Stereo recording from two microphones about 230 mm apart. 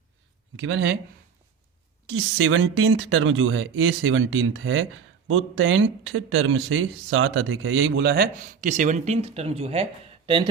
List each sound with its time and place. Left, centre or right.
0.5 s speech: right
2.0 s speech: right